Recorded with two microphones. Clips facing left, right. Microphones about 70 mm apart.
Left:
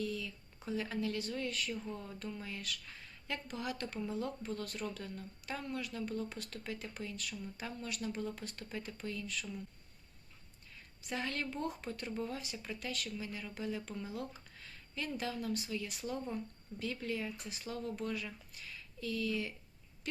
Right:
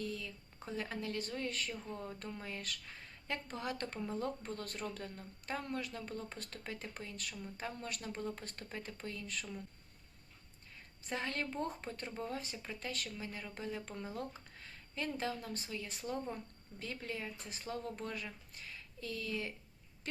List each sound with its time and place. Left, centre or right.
0.0 s speech: right
11.0 s speech: right